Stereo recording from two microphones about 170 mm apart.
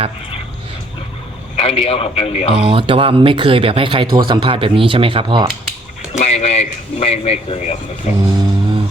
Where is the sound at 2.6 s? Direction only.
30° right (ahead or behind).